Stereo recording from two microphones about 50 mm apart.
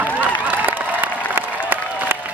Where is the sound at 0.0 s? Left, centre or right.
Right.